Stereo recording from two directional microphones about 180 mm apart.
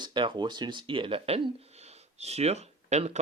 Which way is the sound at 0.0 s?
25° right (ahead or behind).